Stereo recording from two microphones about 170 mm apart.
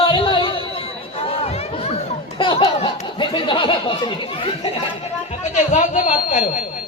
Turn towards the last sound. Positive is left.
turn(degrees=50)  # may be behind; listen again after turning